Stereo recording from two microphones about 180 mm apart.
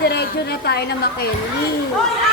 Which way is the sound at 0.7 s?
65° left (ahead or behind).